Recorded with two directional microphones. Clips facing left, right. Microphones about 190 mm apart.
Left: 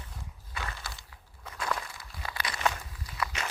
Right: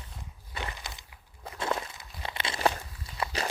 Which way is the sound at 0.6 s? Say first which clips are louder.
Right 1 dB; 20° right (ahead or behind).